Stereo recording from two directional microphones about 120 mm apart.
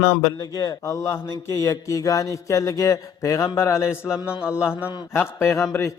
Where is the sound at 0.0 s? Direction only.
30° left (ahead or behind).